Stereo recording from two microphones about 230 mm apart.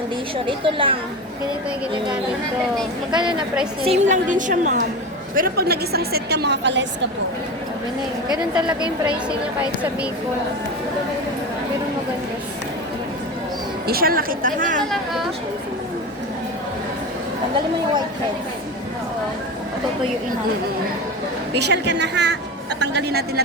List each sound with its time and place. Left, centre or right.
0.4 s a woman's voice: right
3.8 s a woman's voice: right
8.3 s a woman's voice: centre
13.8 s speech: right
21.5 s a woman's voice: right